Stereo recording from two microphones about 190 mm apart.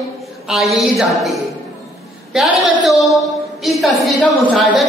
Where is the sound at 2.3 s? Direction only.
Centre (ahead or behind).